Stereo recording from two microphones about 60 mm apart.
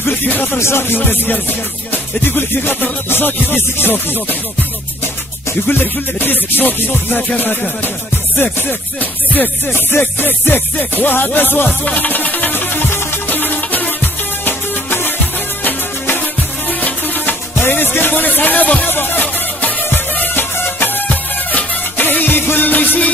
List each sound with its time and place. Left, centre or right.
0.6 s music: left
5.7 s music: left
8.4 s music: left
16.6 s music: left
18.9 s music: left